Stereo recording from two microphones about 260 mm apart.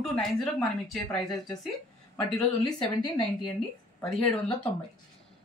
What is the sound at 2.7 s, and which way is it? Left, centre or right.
Speech, centre.